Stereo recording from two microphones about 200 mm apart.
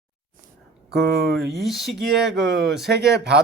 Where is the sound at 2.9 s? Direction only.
55° right (ahead or behind).